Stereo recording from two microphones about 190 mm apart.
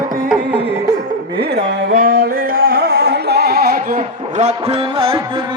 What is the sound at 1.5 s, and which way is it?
Music, 50° right (ahead or behind).